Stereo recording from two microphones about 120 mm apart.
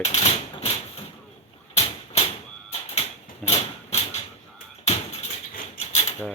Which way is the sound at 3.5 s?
65° left (ahead or behind).